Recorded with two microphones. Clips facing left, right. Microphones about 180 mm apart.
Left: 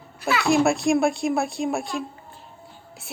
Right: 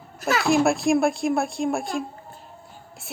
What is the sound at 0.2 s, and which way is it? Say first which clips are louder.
Speech: right 1 dB; 40° right (ahead or behind).